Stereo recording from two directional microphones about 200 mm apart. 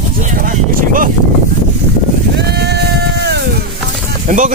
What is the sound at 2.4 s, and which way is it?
Sheep, 55° right (ahead or behind).